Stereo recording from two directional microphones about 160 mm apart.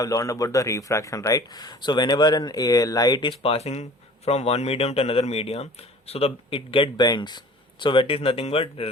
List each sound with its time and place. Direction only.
0.0 s speech: 20° left (ahead or behind); by 8.9 s 35° left (ahead or behind)